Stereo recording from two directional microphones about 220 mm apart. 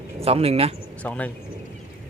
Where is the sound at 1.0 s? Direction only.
5° left (ahead or behind).